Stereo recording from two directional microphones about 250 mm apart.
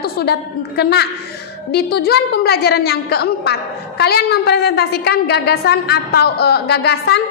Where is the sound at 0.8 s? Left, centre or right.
Left.